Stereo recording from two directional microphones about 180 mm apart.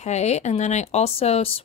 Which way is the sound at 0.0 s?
40° left (ahead or behind).